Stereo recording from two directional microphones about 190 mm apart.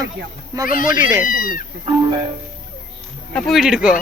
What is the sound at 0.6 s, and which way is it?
Speech, 45° left (ahead or behind).